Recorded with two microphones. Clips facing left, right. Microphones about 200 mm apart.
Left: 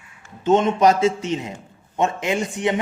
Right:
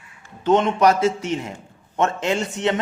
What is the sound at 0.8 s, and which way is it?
A man's voice, 20° left (ahead or behind).